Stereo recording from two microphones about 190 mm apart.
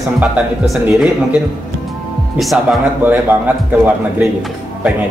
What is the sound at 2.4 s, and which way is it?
Speech, centre (ahead or behind).